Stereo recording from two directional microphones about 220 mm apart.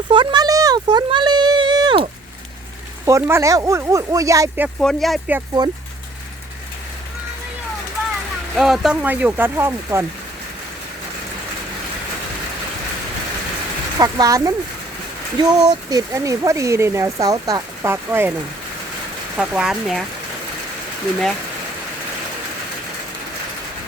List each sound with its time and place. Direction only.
0.1 s a sound: 20° right (ahead or behind)
3.1 s speech: 10° right (ahead or behind)
4.8 s speech: centre (ahead or behind)
8.5 s speech: centre (ahead or behind)
14.0 s speech: 15° right (ahead or behind)
19.4 s speech: 5° right (ahead or behind)